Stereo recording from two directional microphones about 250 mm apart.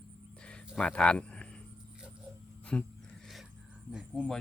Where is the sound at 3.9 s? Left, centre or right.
Centre.